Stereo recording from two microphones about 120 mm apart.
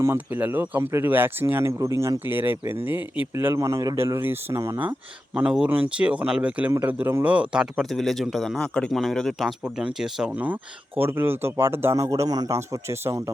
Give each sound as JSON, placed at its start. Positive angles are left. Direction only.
{"t": 0.0, "sound": "speech", "side_deg": -20}
{"t": 6.7, "sound": "speech", "side_deg": -20}